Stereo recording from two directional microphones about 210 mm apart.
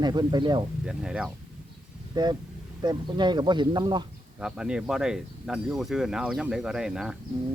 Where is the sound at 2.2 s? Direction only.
20° right (ahead or behind).